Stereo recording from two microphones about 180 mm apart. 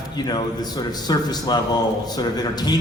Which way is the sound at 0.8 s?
20° left (ahead or behind).